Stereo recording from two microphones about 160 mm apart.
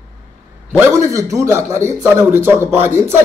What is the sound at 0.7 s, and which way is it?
A man's voice, 15° right (ahead or behind).